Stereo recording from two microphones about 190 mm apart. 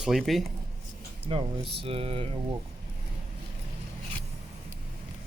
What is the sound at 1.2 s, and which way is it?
Speech, 30° right (ahead or behind).